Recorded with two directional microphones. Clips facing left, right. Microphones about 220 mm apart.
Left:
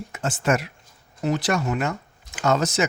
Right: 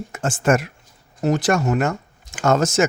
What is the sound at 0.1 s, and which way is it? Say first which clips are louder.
Speech: right 4 dB; 45° right (ahead or behind).